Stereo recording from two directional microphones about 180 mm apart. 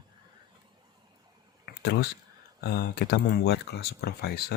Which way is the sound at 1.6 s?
65° left (ahead or behind).